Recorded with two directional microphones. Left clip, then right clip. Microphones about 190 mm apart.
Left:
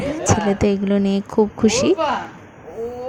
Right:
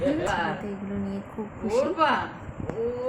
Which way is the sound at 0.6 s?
45° left (ahead or behind).